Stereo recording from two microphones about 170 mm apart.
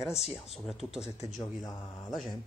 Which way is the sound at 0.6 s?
Centre (ahead or behind).